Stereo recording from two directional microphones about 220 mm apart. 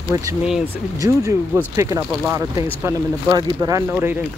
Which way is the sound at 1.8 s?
15° right (ahead or behind).